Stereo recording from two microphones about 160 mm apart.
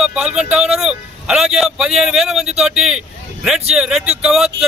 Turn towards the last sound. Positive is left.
turn(degrees=-5)  # may be behind; listen again after turning